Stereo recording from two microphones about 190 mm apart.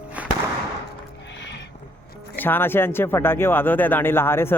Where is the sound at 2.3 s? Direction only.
10° left (ahead or behind).